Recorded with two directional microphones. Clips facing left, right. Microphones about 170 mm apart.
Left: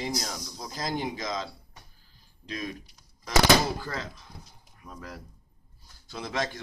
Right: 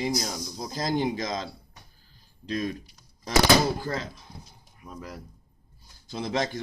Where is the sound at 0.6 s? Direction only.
35° right (ahead or behind).